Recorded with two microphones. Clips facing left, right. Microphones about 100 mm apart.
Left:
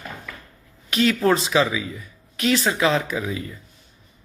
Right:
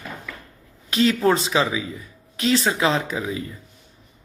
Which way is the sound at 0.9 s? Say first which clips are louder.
Even; 25° right (ahead or behind).